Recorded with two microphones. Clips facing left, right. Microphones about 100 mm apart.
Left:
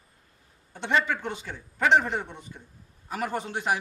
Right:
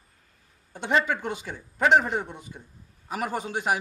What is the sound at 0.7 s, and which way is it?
A man's voice, 10° right (ahead or behind).